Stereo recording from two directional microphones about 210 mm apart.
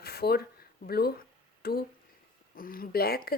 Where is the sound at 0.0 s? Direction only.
45° left (ahead or behind).